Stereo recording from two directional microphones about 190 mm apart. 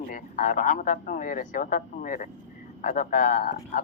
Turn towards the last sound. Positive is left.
turn(degrees=45)  # may be behind; listen again after turning